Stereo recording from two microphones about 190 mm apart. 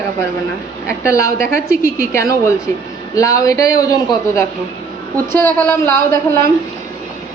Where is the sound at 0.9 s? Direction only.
15° left (ahead or behind).